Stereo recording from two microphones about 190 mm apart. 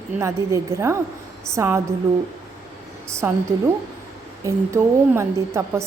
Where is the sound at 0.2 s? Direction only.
15° right (ahead or behind).